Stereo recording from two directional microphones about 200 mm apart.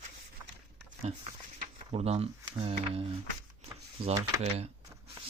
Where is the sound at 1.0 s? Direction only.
30° right (ahead or behind).